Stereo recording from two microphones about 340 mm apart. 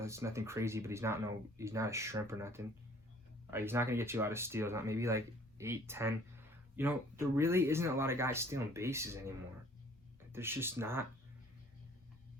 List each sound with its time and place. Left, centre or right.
0.0 s speech: centre
10.3 s speech: centre